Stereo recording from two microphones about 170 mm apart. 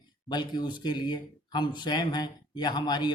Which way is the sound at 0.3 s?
25° left (ahead or behind).